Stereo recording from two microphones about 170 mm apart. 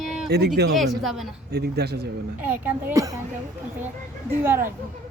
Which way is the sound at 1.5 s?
70° right (ahead or behind).